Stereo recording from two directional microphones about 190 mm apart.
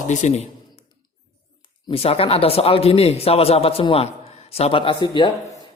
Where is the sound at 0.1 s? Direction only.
40° left (ahead or behind).